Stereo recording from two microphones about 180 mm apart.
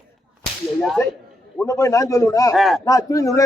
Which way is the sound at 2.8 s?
20° left (ahead or behind).